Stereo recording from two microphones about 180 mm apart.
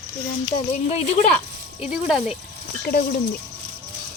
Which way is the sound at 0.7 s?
35° left (ahead or behind).